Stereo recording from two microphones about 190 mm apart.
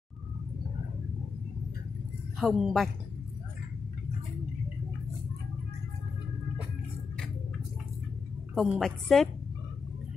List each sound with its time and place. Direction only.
2.4 s a woman's voice: centre (ahead or behind)
8.6 s a woman's voice: centre (ahead or behind)